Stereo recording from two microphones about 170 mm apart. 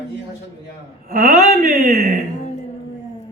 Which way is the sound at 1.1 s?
55° right (ahead or behind).